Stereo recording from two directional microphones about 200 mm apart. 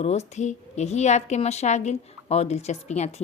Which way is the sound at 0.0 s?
35° left (ahead or behind).